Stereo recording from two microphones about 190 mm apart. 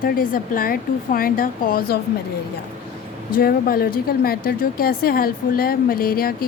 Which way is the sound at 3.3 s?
50° left (ahead or behind).